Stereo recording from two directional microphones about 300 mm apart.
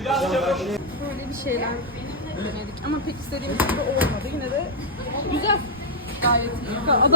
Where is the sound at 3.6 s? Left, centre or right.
Centre.